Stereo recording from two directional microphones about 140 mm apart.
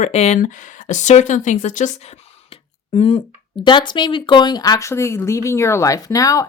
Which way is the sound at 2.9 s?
45° left (ahead or behind).